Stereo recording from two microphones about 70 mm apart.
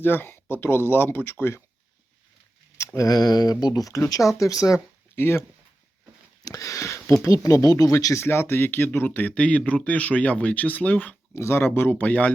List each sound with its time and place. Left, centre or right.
0.0 s speech: left
2.7 s speech: left
5.1 s speech: left
6.4 s speech: left
8.2 s speech: left
11.3 s speech: left